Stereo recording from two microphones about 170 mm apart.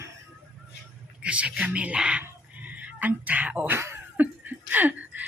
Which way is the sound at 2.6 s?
10° right (ahead or behind).